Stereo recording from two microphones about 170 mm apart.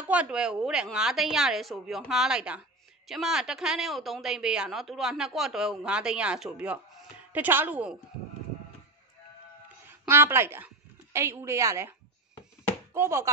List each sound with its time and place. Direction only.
0.0 s speech: 10° right (ahead or behind)
9.8 s a woman's voice: 15° right (ahead or behind)
12.9 s speech: 15° right (ahead or behind)